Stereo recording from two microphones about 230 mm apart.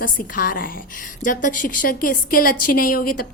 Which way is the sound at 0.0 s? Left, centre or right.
Left.